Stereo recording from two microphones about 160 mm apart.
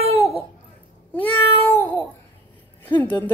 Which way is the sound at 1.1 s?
10° left (ahead or behind).